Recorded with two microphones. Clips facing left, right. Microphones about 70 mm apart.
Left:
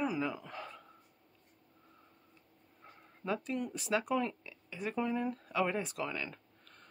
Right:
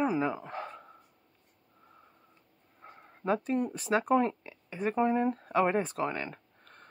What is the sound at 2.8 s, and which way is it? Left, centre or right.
Speech, right.